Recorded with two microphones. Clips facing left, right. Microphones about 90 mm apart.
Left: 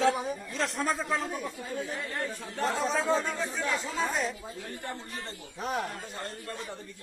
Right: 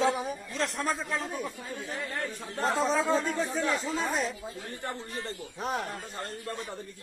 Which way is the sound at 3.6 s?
35° right (ahead or behind).